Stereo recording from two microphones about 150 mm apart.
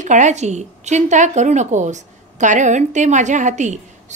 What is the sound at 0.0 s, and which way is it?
A woman's voice, 55° right (ahead or behind).